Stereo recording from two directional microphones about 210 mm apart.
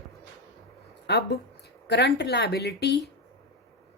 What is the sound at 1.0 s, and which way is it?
Speech, 50° left (ahead or behind).